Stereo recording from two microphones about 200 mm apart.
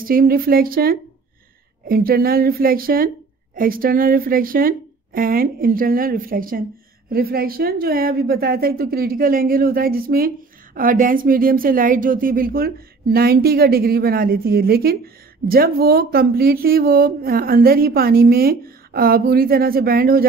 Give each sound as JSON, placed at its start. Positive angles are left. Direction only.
{"t": 0.0, "sound": "a woman's voice", "side_deg": -45}